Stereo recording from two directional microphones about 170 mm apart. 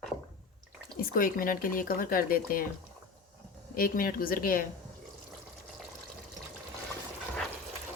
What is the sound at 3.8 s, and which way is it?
Speech, 60° left (ahead or behind).